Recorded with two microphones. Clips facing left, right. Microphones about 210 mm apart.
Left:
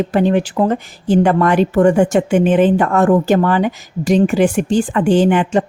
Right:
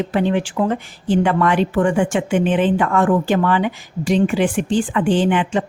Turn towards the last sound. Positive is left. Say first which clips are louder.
# left 4 dB
turn(degrees=45)  # may be behind; listen again after turning